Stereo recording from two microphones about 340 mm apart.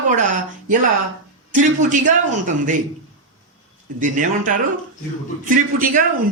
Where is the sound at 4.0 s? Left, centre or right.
Right.